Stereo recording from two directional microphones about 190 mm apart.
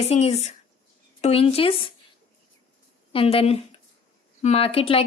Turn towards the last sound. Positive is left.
turn(degrees=30)  # may be behind; listen again after turning